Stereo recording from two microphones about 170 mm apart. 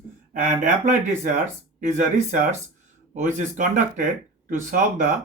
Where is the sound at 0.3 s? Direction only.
50° right (ahead or behind).